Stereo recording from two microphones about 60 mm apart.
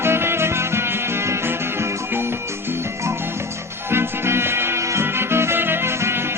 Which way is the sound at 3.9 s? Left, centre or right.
Right.